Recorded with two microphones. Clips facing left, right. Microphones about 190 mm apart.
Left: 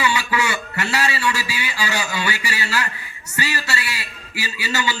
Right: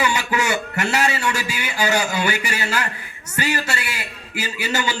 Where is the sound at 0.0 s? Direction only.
45° right (ahead or behind).